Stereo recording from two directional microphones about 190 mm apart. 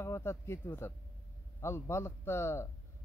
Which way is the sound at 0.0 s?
15° left (ahead or behind).